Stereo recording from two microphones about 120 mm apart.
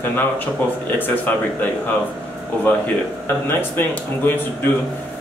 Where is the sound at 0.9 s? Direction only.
15° left (ahead or behind).